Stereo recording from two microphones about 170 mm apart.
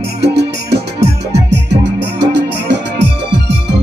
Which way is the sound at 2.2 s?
90° right.